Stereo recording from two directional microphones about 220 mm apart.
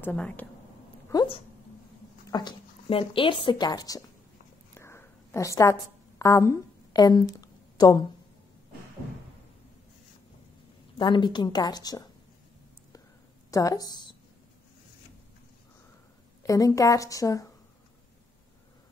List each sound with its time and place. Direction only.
0.0 s a woman's voice: 5° left (ahead or behind)
1.0 s speech: 20° left (ahead or behind)
4.7 s a sound: 10° left (ahead or behind)
11.0 s speech: 20° left (ahead or behind)
13.5 s a woman's voice: 15° left (ahead or behind)
16.4 s a woman's voice: 15° left (ahead or behind)